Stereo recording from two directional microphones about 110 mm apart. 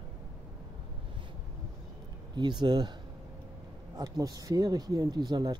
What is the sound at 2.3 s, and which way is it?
Speech, 40° right (ahead or behind).